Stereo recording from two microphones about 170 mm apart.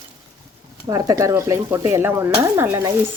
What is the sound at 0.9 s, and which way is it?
Speech, 20° right (ahead or behind).